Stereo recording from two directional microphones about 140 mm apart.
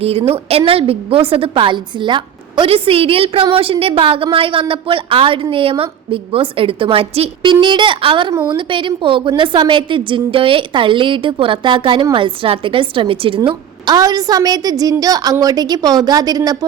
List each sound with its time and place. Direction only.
0.0 s a woman's voice: 45° right (ahead or behind); by 16.6 s 25° right (ahead or behind)